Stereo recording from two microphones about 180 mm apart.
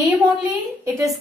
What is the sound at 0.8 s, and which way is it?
Speech, 20° right (ahead or behind).